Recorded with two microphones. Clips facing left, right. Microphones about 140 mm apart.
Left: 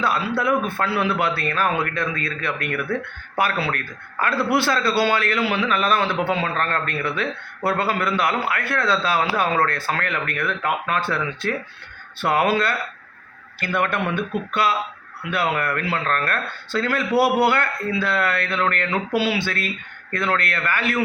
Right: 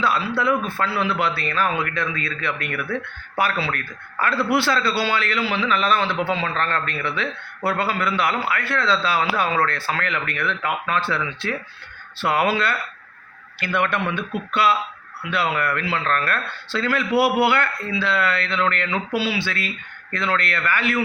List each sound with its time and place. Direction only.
0.0 s speech: 50° left (ahead or behind)